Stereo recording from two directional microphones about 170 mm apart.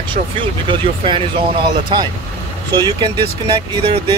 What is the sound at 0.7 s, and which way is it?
Speech, 30° right (ahead or behind).